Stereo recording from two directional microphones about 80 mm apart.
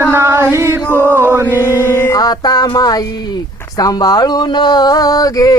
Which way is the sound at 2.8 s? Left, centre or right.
Left.